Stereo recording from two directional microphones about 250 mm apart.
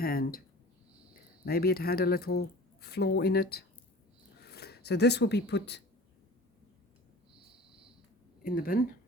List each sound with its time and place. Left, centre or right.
0.0 s a sound: left
1.1 s speech: left
8.4 s speech: left